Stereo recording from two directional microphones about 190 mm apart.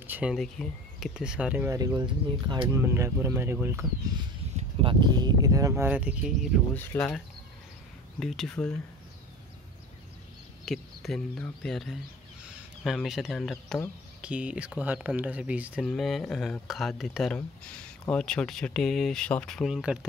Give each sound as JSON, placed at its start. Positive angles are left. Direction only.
{"t": 0.0, "sound": "speech", "side_deg": -10}
{"t": 1.8, "sound": "speech", "side_deg": -20}
{"t": 4.6, "sound": "speech", "side_deg": -25}
{"t": 6.7, "sound": "speech", "side_deg": 10}
{"t": 8.2, "sound": "speech", "side_deg": 0}
{"t": 10.6, "sound": "speech", "side_deg": 0}